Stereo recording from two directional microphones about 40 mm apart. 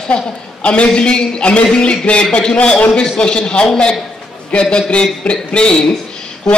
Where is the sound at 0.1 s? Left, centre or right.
Left.